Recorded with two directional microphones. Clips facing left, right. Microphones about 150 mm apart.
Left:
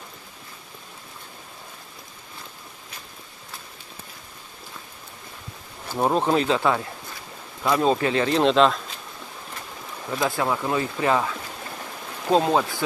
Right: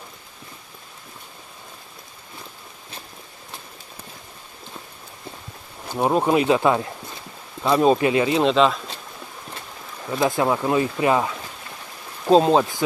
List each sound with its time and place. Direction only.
5.9 s speech: 5° right (ahead or behind)
10.1 s speech: 20° right (ahead or behind)
12.3 s speech: 20° right (ahead or behind)